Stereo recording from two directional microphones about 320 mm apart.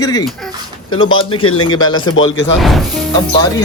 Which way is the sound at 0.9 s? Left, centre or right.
Left.